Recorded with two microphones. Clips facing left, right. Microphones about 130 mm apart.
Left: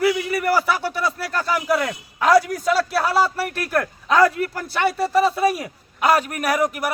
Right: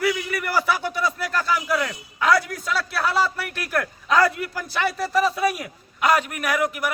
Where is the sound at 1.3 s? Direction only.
35° left (ahead or behind).